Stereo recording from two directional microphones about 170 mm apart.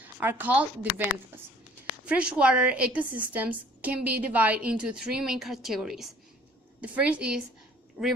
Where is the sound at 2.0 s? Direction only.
5° right (ahead or behind).